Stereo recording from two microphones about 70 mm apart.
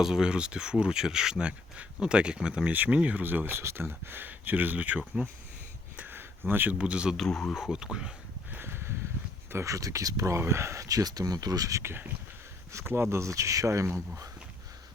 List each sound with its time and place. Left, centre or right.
0.0 s speech: centre
6.0 s a sound: right
6.7 s speech: centre
7.2 s speech: centre
8.4 s a sound: right
9.5 s speech: right
10.3 s speech: right
10.8 s speech: right
11.8 s speech: right